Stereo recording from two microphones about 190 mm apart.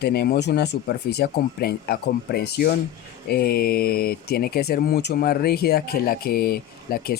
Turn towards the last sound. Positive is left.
turn(degrees=50)  # may be behind; listen again after turning